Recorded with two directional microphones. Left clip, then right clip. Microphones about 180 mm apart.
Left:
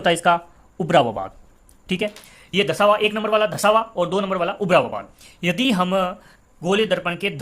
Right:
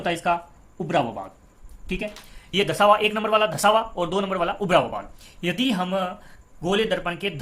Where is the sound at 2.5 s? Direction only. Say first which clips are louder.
Left 1 dB; 25° left (ahead or behind); by 6.3 s 45° left (ahead or behind).